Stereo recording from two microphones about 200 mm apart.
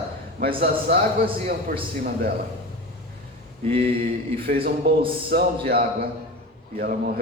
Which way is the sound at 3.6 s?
30° right (ahead or behind).